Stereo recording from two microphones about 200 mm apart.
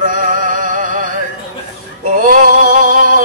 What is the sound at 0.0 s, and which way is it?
Music, 40° right (ahead or behind).